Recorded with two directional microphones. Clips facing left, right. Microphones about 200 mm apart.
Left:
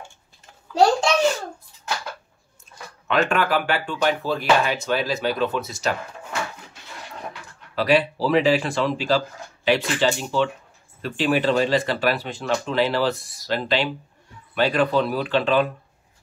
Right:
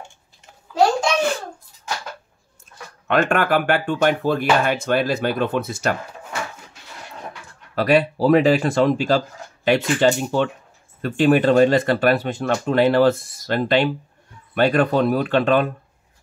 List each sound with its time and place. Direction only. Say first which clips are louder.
3.1 s speech: right 3 dB; 50° right (ahead or behind)
7.7 s speech: right 2 dB; 50° right (ahead or behind)